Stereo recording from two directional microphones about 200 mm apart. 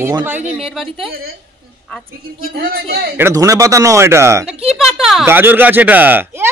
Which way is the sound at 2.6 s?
45° right (ahead or behind).